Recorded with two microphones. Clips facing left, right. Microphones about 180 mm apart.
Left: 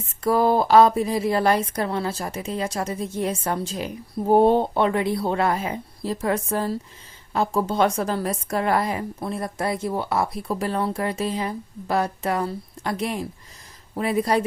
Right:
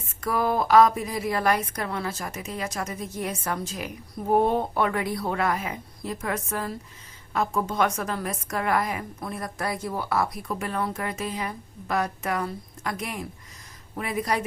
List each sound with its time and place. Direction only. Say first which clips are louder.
0.2 s a woman's voice: left 6 dB; 30° left (ahead or behind)